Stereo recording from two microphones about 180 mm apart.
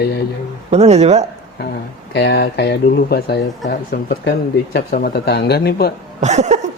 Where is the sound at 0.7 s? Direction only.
35° right (ahead or behind).